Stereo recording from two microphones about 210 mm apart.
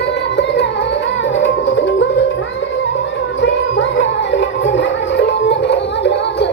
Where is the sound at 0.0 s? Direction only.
55° left (ahead or behind).